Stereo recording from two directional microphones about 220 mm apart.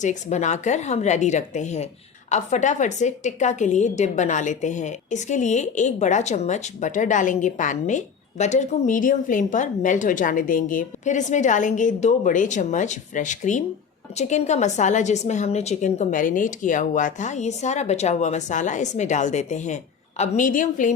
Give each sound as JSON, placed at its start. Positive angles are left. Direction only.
{"t": 0.0, "sound": "a woman's voice", "side_deg": 30}